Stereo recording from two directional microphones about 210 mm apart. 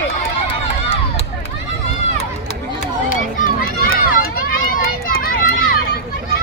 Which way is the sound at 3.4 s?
45° left (ahead or behind).